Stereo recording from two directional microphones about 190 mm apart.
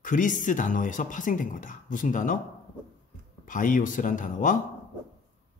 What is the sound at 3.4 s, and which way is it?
Speech, 45° left (ahead or behind).